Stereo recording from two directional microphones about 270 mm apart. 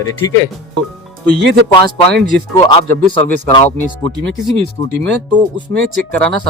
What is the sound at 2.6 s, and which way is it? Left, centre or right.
Speech, centre.